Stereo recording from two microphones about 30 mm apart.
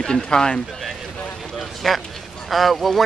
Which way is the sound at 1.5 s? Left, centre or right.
Centre.